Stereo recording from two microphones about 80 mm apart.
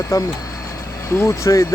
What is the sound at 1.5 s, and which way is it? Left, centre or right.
Speech, left.